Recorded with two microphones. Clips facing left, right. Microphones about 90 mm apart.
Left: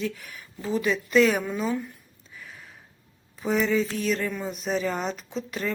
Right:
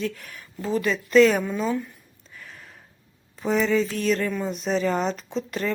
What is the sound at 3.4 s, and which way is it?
Speech, centre (ahead or behind).